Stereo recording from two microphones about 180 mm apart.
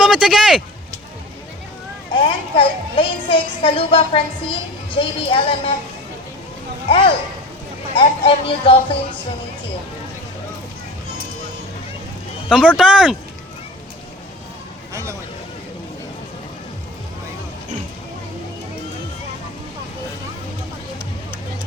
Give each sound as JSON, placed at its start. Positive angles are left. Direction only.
{"t": 0.0, "sound": "speech", "side_deg": -5}
{"t": 2.1, "sound": "speech", "side_deg": 30}
{"t": 6.8, "sound": "speech", "side_deg": 30}
{"t": 12.5, "sound": "speech", "side_deg": -5}